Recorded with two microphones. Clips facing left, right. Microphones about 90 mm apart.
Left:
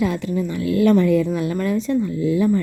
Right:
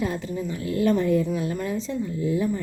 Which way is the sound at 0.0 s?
85° left.